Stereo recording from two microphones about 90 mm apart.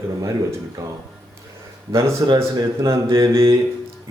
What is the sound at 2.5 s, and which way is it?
Speech, 45° right (ahead or behind).